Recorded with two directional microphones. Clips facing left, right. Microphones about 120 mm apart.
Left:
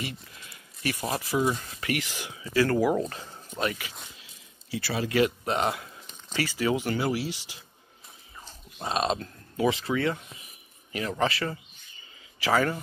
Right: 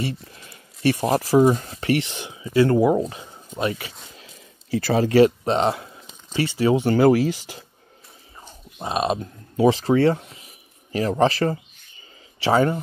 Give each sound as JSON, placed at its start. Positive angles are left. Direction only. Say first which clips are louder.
{"t": 0.0, "sound": "speech", "louder": "right 8 dB", "side_deg": -35}
{"t": 4.2, "sound": "speech", "louder": "right 8 dB", "side_deg": -45}
{"t": 7.0, "sound": "speech", "louder": "right 12 dB", "side_deg": -45}
{"t": 8.4, "sound": "a sound", "louder": "right 4 dB", "side_deg": -20}
{"t": 9.7, "sound": "a man's voice", "louder": "right 9 dB", "side_deg": -35}
{"t": 12.4, "sound": "speech", "louder": "right 6 dB", "side_deg": -25}